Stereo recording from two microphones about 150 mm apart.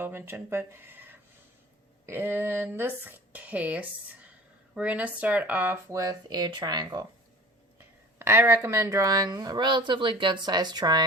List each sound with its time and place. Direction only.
0.0 s speech: 15° right (ahead or behind)
7.8 s speech: 15° right (ahead or behind)